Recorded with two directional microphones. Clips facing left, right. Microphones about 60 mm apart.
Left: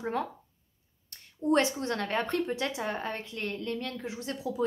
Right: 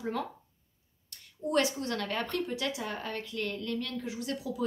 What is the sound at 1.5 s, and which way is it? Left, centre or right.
A woman's voice, left.